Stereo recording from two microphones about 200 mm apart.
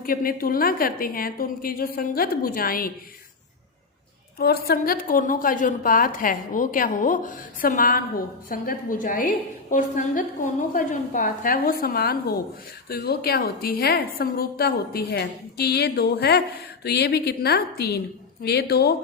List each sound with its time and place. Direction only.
0.0 s a woman's voice: 45° left (ahead or behind)
4.4 s a woman's voice: 50° left (ahead or behind)